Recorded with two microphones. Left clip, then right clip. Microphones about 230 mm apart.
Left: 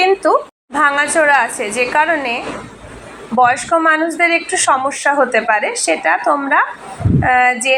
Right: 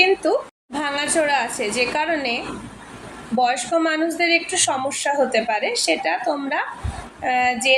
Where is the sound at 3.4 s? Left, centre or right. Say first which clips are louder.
Left 7 dB; centre.